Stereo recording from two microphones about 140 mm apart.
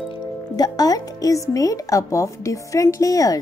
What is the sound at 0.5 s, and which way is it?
Speech, 25° left (ahead or behind).